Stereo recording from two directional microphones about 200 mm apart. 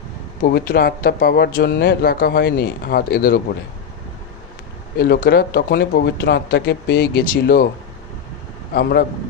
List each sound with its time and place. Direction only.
0.5 s speech: 50° left (ahead or behind)
4.9 s speech: 50° left (ahead or behind)
8.7 s speech: 50° left (ahead or behind)